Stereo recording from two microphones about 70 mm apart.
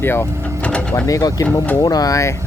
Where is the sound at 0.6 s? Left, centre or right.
Centre.